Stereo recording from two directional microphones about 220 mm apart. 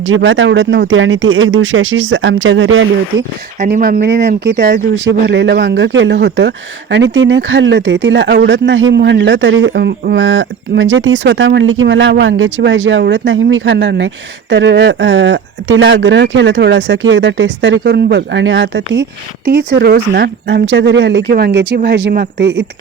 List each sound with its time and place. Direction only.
0.1 s speech: 55° right (ahead or behind)
3.6 s speech: 40° right (ahead or behind)